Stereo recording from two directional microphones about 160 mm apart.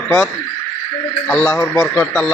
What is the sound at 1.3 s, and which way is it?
Speech, 10° left (ahead or behind).